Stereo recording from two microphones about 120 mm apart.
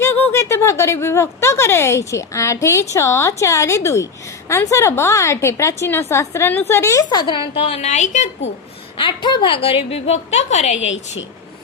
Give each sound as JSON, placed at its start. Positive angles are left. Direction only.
{"t": 0.0, "sound": "speech", "side_deg": 20}
{"t": 7.1, "sound": "a woman's voice", "side_deg": 40}
{"t": 9.0, "sound": "a woman's voice", "side_deg": 40}